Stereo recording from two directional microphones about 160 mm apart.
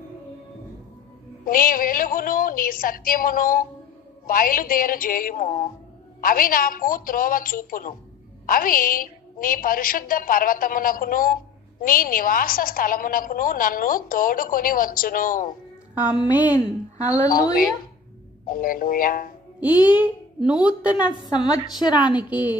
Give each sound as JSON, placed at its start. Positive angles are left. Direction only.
{"t": 1.4, "sound": "a woman's voice", "side_deg": 60}
{"t": 16.5, "sound": "a woman's voice", "side_deg": 20}
{"t": 18.5, "sound": "a woman's voice", "side_deg": 60}
{"t": 19.8, "sound": "a woman's voice", "side_deg": -10}
{"t": 21.3, "sound": "a woman's voice", "side_deg": 25}